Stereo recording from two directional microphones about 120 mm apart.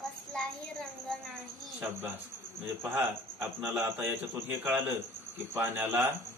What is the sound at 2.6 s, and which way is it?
A man's voice, 15° right (ahead or behind).